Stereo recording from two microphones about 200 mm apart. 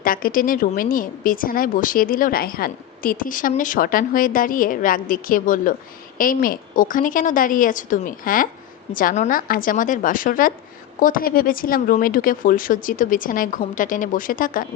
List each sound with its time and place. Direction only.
0.0 s a woman's voice: 45° left (ahead or behind)